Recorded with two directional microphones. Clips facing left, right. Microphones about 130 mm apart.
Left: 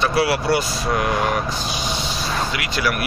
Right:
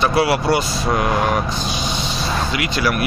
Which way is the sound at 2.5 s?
25° right (ahead or behind).